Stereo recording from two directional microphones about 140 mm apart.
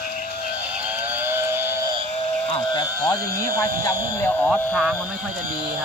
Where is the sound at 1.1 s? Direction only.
15° right (ahead or behind).